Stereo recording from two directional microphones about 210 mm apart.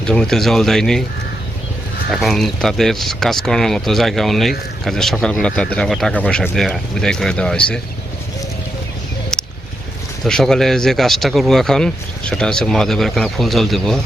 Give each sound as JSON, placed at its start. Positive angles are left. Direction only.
{"t": 0.0, "sound": "speech", "side_deg": 5}
{"t": 2.0, "sound": "speech", "side_deg": 0}
{"t": 9.3, "sound": "a sound", "side_deg": 0}
{"t": 10.2, "sound": "speech", "side_deg": 5}